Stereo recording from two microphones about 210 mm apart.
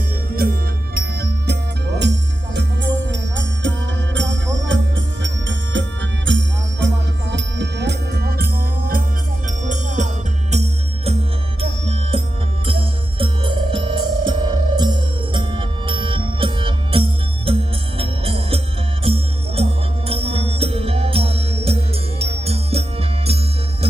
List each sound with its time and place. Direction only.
0.4 s music: 45° right (ahead or behind)
2.6 s music: 60° right (ahead or behind); by 23.4 s 30° right (ahead or behind)